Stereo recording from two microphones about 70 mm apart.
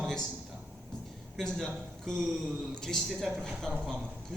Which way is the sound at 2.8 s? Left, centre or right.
Centre.